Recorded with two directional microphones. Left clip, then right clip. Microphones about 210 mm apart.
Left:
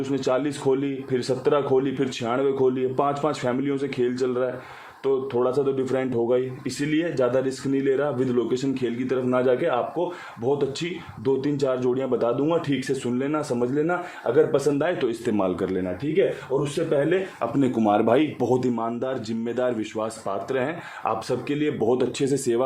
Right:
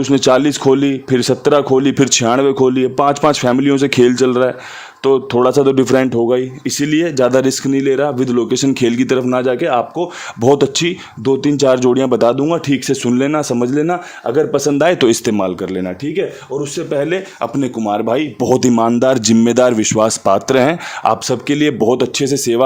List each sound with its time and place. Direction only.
0.0 s speech: 55° right (ahead or behind); by 15.8 s 35° right (ahead or behind)
16.7 s speech: 50° right (ahead or behind)
17.6 s speech: 20° right (ahead or behind); by 21.7 s 55° right (ahead or behind)
21.8 s speech: 40° right (ahead or behind)